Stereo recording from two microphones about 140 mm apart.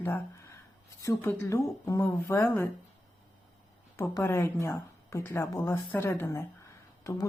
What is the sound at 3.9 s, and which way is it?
A woman's voice, 20° left (ahead or behind).